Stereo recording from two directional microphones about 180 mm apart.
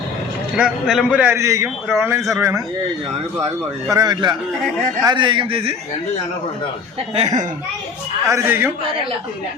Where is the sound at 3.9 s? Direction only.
20° right (ahead or behind).